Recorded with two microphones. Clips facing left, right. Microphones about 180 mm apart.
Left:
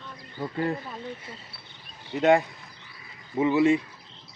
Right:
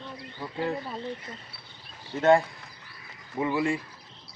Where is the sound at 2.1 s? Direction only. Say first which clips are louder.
Even; 20° left (ahead or behind).